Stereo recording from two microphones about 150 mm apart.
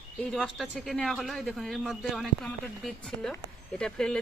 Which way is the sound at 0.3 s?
Centre (ahead or behind).